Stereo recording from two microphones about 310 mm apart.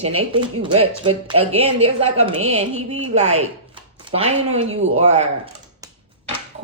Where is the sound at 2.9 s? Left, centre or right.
Right.